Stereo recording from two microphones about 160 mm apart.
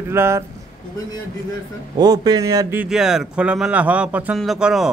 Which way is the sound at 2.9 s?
5° right (ahead or behind).